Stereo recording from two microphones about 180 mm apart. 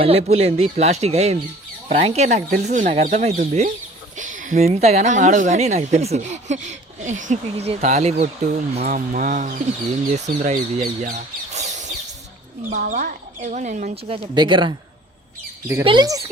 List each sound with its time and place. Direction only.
0.0 s speech: 35° right (ahead or behind)
15.8 s speech: 25° right (ahead or behind)